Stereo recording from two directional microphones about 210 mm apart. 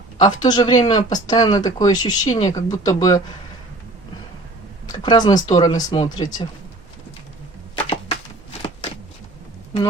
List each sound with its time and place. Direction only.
0.2 s speech: 20° left (ahead or behind)
4.9 s speech: 20° left (ahead or behind)
7.9 s a sound: 30° left (ahead or behind)